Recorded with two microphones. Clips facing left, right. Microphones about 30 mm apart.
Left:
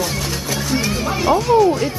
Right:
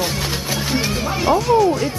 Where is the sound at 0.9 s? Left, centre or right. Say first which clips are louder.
Left 1 dB; centre.